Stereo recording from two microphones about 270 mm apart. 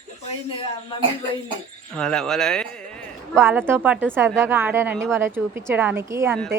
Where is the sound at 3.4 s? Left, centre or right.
Centre.